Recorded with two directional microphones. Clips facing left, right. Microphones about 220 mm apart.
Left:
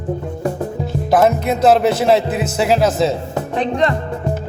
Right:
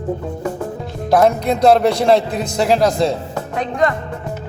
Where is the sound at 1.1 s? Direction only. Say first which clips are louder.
Right 1 dB; 5° left (ahead or behind).